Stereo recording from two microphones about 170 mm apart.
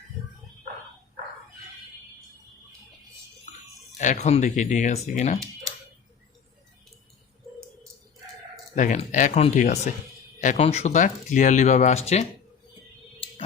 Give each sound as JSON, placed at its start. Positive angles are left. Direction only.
{"t": 3.9, "sound": "speech", "side_deg": 45}
{"t": 8.7, "sound": "speech", "side_deg": 45}
{"t": 13.1, "sound": "tick", "side_deg": 30}